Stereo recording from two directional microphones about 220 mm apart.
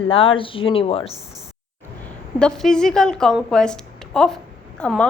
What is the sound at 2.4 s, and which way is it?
A woman's voice, 5° left (ahead or behind).